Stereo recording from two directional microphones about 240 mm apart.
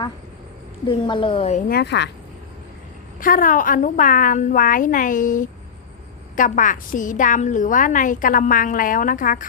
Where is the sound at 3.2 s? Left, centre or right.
Left.